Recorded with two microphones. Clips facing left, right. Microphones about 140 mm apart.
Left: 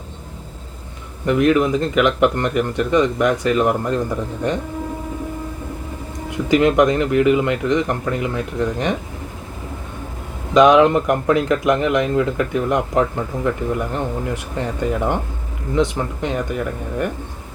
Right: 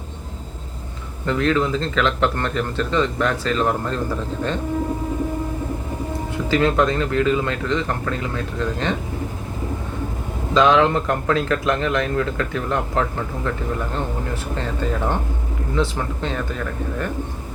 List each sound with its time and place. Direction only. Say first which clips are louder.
1.2 s speech: left 4 dB; 15° left (ahead or behind)
6.3 s speech: left 4 dB; 15° left (ahead or behind)
10.5 s speech: left 4 dB; 15° left (ahead or behind)